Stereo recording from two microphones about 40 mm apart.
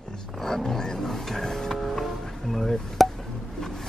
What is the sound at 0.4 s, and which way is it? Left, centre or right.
Roaring cats, centre.